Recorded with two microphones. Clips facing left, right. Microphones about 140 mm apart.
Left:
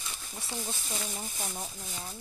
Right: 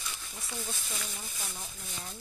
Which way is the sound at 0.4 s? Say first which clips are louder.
Left 3 dB; 30° left (ahead or behind).